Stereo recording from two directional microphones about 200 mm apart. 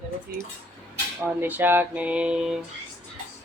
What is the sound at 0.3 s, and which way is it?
Speech, 50° right (ahead or behind).